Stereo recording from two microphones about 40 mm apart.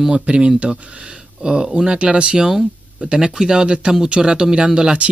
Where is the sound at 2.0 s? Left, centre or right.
Right.